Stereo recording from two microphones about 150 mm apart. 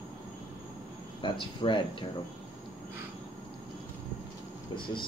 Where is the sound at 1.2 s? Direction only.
35° left (ahead or behind).